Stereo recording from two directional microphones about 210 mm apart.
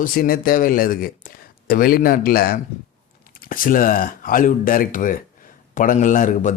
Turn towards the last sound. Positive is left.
turn(degrees=40)  # may be behind; listen again after turning